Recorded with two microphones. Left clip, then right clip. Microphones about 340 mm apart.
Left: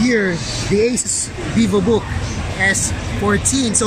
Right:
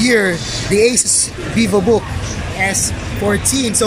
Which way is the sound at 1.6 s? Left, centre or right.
Centre.